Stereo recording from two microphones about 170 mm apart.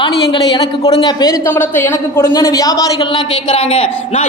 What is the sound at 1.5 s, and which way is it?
Speech, 10° left (ahead or behind).